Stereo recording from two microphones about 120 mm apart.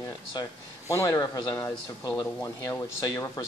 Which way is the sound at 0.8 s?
25° left (ahead or behind).